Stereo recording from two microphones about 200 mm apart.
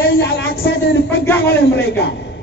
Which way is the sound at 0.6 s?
50° left (ahead or behind).